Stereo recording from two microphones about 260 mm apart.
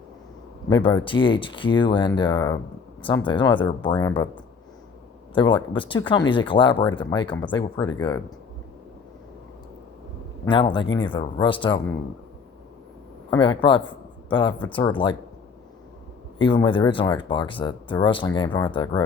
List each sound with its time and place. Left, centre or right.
0.7 s speech: centre
5.3 s speech: centre
10.4 s speech: centre
13.3 s speech: centre
16.4 s speech: centre